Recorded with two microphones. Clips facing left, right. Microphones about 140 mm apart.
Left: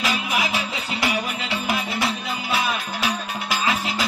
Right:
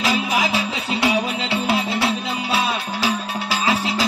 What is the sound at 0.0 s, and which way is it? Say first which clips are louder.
Music: right 4 dB; 35° right (ahead or behind).